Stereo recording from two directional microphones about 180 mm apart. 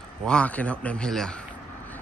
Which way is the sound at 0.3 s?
5° left (ahead or behind).